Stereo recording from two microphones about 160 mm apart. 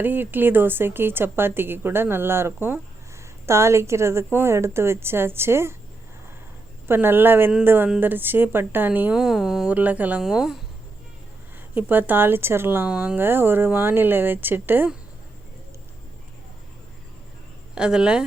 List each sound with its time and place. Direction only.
0.0 s a woman's voice: 10° right (ahead or behind)
6.8 s a woman's voice: 15° right (ahead or behind)
11.7 s a woman's voice: 10° right (ahead or behind)
17.7 s speech: 5° right (ahead or behind)